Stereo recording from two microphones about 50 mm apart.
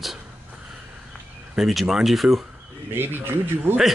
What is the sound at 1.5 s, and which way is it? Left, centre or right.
Speech, centre.